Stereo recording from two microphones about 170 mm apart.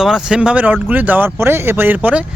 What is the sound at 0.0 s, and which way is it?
Speech, 5° right (ahead or behind).